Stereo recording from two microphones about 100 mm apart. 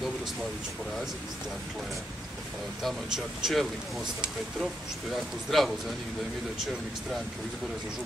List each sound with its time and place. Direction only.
2.8 s speech: centre (ahead or behind)